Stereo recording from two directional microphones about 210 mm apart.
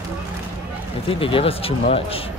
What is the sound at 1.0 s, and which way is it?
Speech, 25° left (ahead or behind).